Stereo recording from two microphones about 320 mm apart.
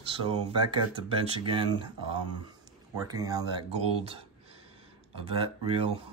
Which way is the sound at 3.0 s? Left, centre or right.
Centre.